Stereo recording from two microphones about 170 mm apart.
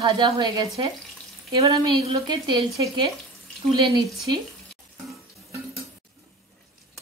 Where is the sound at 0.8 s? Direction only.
30° right (ahead or behind).